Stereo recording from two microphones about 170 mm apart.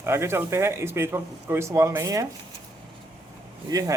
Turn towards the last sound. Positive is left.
turn(degrees=-20)  # may be behind; listen again after turning